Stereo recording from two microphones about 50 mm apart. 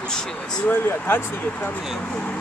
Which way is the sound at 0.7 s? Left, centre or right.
Left.